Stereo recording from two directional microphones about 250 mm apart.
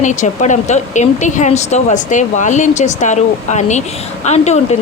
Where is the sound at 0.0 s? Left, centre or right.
Left.